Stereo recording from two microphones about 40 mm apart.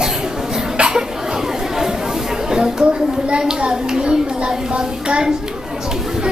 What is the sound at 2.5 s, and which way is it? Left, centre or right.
A child's voice, centre.